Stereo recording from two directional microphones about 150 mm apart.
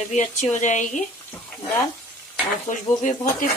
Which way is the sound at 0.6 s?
55° left (ahead or behind).